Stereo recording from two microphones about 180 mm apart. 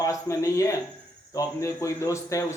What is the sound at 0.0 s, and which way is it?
Speech, 15° left (ahead or behind).